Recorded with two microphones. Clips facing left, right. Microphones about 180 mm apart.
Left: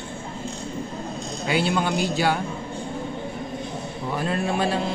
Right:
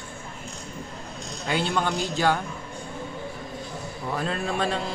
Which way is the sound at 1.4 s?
10° left (ahead or behind).